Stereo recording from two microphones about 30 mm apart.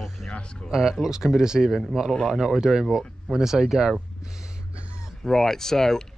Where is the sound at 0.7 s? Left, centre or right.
Centre.